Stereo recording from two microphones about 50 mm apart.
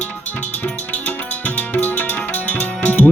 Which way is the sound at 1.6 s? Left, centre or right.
Left.